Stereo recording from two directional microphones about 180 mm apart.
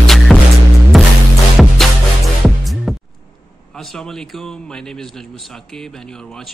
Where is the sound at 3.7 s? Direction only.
Centre (ahead or behind).